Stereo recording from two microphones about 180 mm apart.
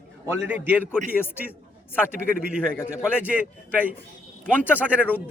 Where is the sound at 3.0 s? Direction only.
5° right (ahead or behind).